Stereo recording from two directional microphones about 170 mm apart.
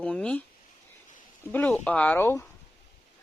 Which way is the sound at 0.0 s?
5° left (ahead or behind).